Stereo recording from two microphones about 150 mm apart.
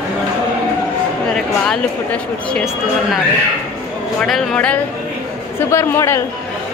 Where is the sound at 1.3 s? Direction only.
5° left (ahead or behind).